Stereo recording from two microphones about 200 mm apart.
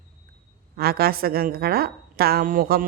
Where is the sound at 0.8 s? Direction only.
50° right (ahead or behind).